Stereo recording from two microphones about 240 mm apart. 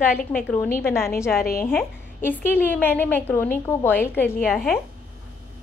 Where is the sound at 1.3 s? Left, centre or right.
Left.